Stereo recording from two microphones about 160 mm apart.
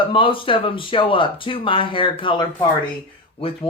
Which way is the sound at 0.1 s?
35° left (ahead or behind).